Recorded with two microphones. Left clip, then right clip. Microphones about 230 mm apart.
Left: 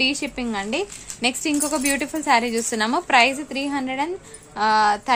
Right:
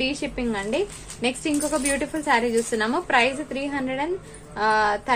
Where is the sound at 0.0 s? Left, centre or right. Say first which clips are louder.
Left 3 dB; left.